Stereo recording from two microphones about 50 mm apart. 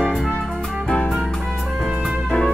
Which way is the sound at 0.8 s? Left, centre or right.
Left.